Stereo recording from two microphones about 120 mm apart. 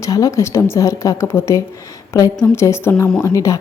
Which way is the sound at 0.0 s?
30° left (ahead or behind).